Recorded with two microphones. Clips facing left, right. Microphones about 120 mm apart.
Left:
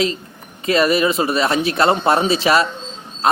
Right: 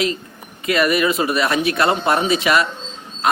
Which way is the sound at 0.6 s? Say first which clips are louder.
Left 2 dB; 30° left (ahead or behind).